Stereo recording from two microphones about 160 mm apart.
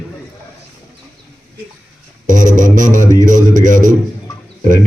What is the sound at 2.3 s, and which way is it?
A man's voice, 50° right (ahead or behind).